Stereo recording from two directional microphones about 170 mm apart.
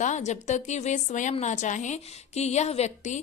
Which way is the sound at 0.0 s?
45° left (ahead or behind).